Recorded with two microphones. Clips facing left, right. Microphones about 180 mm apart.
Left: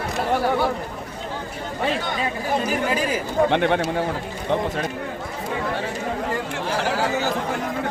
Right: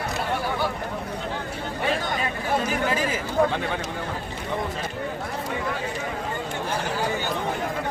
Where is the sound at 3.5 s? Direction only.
65° left (ahead or behind).